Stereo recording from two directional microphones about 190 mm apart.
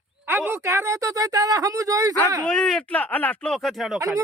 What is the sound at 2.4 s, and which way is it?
Speech, centre (ahead or behind).